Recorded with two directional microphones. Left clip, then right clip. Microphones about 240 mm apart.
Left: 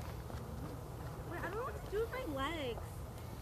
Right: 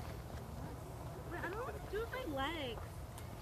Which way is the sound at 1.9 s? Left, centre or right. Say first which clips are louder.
Left 2 dB; left.